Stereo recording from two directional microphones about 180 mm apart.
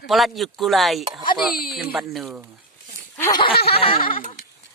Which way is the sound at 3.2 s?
15° left (ahead or behind).